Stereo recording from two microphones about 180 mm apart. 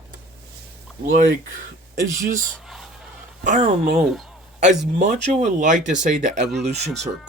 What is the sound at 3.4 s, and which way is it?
Speech, 45° right (ahead or behind).